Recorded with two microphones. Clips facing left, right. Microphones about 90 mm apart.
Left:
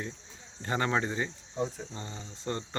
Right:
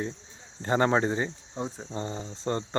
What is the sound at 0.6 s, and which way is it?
Speech, 30° right (ahead or behind).